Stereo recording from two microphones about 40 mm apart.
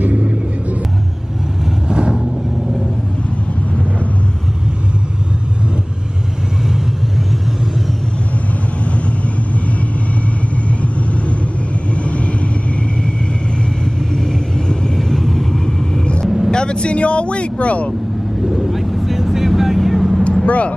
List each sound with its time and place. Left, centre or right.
1.9 s vehicle: right
11.9 s vehicle: left
15.0 s vehicle: centre; by 17.9 s left
18.5 s vehicle: centre
20.4 s vehicle: left